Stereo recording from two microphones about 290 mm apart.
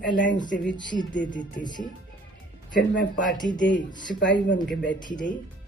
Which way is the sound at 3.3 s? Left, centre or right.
Centre.